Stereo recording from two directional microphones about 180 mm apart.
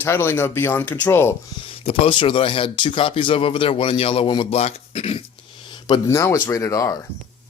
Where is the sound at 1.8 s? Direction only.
30° left (ahead or behind).